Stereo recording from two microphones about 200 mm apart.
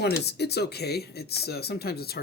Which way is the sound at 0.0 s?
55° left (ahead or behind).